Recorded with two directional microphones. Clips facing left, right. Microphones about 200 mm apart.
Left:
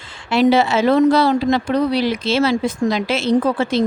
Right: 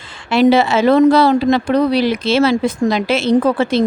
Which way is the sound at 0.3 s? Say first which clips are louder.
Right 3 dB; 85° right.